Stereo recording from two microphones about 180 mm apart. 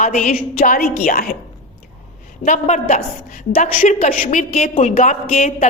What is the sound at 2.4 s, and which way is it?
Speech, 45° left (ahead or behind).